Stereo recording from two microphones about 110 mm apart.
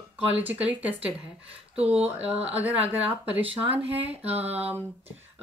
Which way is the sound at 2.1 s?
70° right (ahead or behind).